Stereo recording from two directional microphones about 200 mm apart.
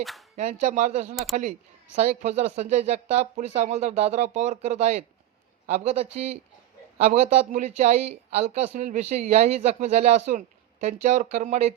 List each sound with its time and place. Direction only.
0.0 s speech: centre (ahead or behind)
0.3 s speech: 35° right (ahead or behind)